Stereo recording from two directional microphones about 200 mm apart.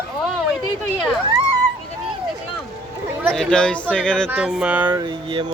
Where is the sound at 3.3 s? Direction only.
5° left (ahead or behind).